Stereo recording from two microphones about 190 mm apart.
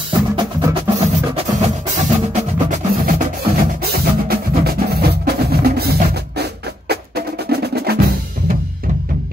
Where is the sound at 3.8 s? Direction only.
55° right (ahead or behind).